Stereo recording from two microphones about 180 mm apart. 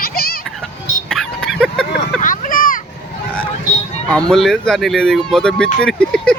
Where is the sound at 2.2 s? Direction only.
50° left (ahead or behind).